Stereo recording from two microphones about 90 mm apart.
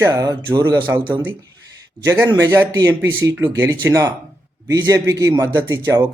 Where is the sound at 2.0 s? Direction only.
35° right (ahead or behind).